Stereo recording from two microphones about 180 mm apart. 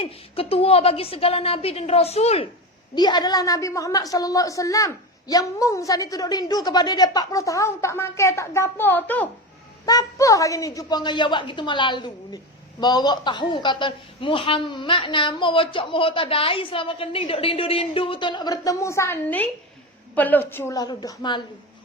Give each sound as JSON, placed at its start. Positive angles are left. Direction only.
{"t": 0.0, "sound": "a woman's voice", "side_deg": 30}
{"t": 2.9, "sound": "a woman's voice", "side_deg": 25}
{"t": 9.8, "sound": "a woman's voice", "side_deg": 20}